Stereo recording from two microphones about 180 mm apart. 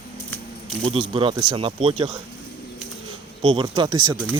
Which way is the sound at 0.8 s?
30° right (ahead or behind).